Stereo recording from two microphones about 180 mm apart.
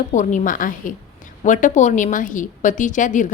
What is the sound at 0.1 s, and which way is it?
A woman's voice, 45° left (ahead or behind).